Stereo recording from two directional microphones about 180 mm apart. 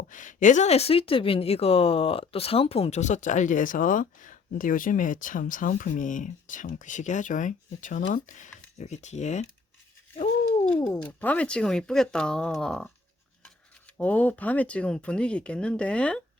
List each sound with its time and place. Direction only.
0.1 s speech: 45° left (ahead or behind)
10.8 s speech: 10° left (ahead or behind)
14.0 s speech: 10° left (ahead or behind)